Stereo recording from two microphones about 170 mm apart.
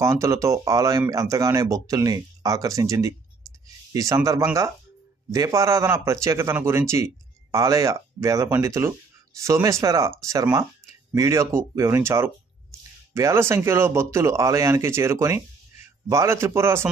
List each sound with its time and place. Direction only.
0.0 s speech: 15° right (ahead or behind)